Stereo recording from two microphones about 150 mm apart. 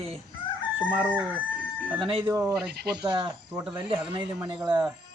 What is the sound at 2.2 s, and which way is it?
Speech, 10° right (ahead or behind).